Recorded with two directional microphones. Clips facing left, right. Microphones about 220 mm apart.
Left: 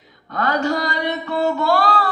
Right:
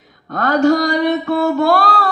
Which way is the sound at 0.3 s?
45° right (ahead or behind).